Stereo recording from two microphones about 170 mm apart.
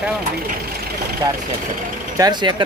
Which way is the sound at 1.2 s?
20° right (ahead or behind).